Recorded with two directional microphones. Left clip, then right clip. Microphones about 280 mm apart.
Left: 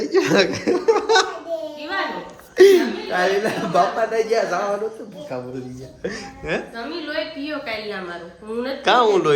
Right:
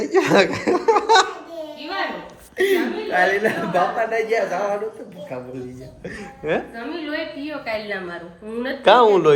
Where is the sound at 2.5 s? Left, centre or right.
Centre.